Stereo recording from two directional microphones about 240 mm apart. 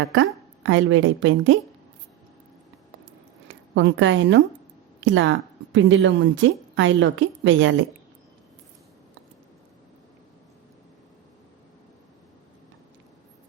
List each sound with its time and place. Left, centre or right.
0.0 s a woman's voice: right
3.5 s a woman's voice: right